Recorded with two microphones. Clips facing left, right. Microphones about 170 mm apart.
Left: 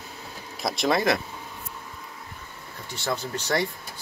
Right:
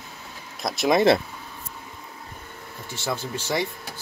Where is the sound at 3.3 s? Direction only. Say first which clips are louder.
Left 1 dB; 25° right (ahead or behind).